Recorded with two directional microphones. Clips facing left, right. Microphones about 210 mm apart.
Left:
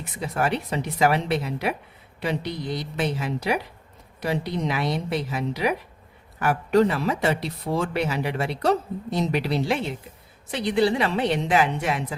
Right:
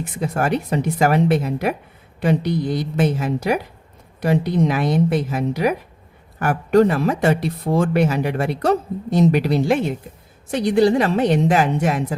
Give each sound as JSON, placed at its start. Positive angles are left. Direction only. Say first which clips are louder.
{"t": 0.0, "sound": "speech", "louder": "right 4 dB", "side_deg": -45}